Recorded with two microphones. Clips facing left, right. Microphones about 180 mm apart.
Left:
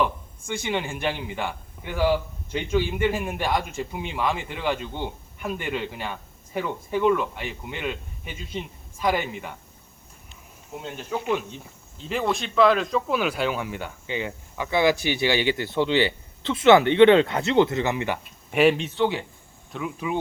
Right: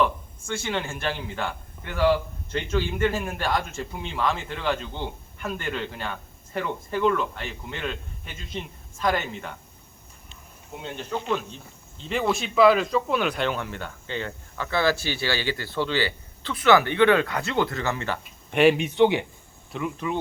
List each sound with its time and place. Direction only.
0.0 s a man's voice: 15° left (ahead or behind)
10.8 s a man's voice: 5° left (ahead or behind)
18.2 s speech: centre (ahead or behind)
18.8 s a man's voice: 15° right (ahead or behind)
19.7 s speech: 5° left (ahead or behind)